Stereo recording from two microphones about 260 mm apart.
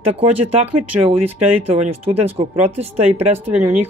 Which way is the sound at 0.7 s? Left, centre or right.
Right.